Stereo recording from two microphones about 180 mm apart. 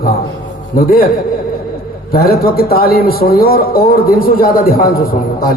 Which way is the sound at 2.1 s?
55° left (ahead or behind).